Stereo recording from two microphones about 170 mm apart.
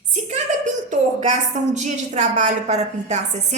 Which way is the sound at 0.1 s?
45° right (ahead or behind).